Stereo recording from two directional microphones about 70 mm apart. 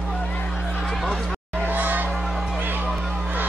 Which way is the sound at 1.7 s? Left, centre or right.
Right.